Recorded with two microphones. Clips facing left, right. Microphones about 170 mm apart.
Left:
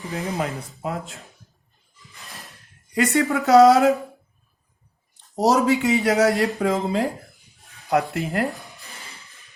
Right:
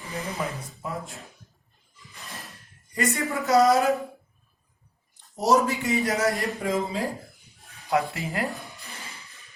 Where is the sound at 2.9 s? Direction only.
80° left.